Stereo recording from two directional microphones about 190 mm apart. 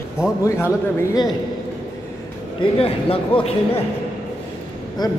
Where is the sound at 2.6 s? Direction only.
30° left (ahead or behind).